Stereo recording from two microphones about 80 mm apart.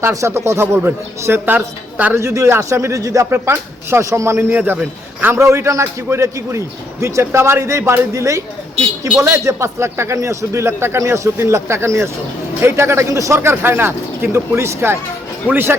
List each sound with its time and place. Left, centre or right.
0.0 s a man's voice: right
2.1 s a man's voice: right
3.2 s a man's voice: right
4.5 s speech: right
5.3 s a man's voice: right